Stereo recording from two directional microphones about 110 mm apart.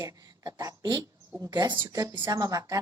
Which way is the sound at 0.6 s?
35° right (ahead or behind).